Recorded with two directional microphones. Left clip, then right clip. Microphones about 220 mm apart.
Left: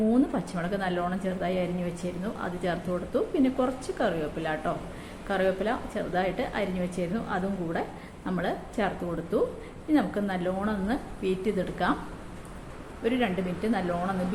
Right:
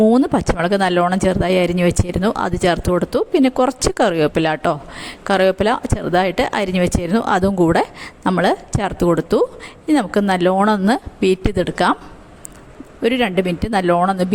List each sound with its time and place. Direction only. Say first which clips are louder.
0.1 s speech: right 11 dB; 50° right (ahead or behind)
13.0 s speech: right 11 dB; 50° right (ahead or behind)